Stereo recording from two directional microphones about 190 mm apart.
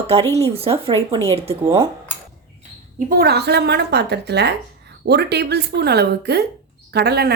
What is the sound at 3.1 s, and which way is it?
Speech, 55° right (ahead or behind).